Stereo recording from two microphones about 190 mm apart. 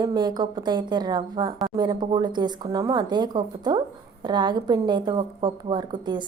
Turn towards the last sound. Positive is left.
turn(degrees=-25)  # may be behind; listen again after turning